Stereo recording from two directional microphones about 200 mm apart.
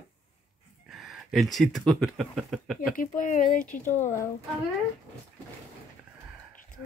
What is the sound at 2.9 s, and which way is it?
Speech, 40° left (ahead or behind).